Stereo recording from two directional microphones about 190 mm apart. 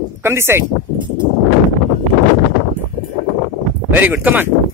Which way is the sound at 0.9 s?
25° right (ahead or behind).